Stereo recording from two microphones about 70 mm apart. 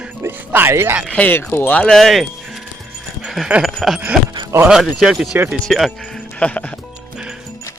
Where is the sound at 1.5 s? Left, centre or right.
Left.